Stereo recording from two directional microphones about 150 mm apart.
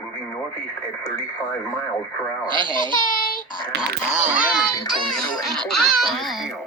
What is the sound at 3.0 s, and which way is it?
Child singing, 65° left (ahead or behind).